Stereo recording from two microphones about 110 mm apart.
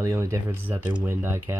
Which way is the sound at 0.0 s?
25° right (ahead or behind).